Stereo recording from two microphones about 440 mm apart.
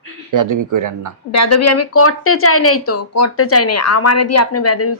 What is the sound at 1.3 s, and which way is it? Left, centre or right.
Speech, left.